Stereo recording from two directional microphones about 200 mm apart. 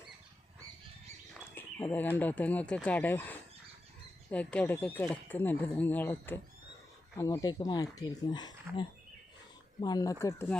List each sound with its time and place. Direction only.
1.5 s speech: 10° left (ahead or behind)